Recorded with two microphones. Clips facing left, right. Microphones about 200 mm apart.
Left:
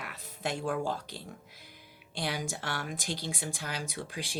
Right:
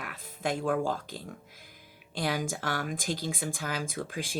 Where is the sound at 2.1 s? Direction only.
50° right (ahead or behind).